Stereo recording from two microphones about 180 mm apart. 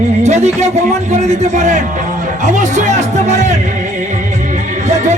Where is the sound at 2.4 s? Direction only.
40° right (ahead or behind).